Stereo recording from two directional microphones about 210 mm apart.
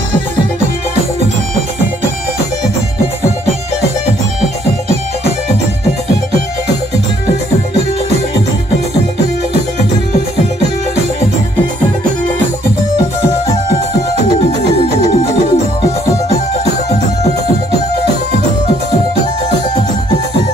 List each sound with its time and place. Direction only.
15.5 s music: 30° left (ahead or behind)